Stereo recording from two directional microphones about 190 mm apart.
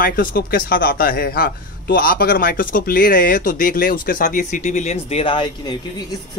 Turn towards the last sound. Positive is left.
turn(degrees=25)  # may be behind; listen again after turning